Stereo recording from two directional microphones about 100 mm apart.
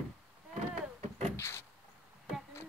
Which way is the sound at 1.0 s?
90° right.